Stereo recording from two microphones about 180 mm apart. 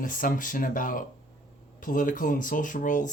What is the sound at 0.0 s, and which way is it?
Speech, 50° left (ahead or behind).